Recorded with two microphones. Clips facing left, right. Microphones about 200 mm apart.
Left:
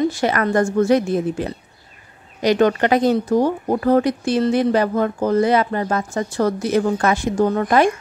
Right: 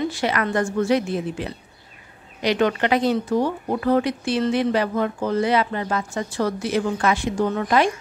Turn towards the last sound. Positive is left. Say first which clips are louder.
# left 4 dB
turn(degrees=50)  # may be behind; listen again after turning